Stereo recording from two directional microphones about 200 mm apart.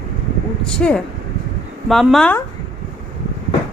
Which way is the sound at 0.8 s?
5° left (ahead or behind).